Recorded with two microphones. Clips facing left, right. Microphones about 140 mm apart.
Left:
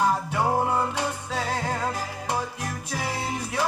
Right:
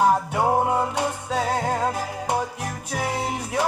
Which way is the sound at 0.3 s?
30° right (ahead or behind).